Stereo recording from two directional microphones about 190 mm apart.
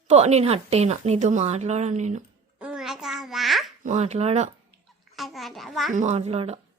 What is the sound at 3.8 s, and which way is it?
Speech, 35° right (ahead or behind).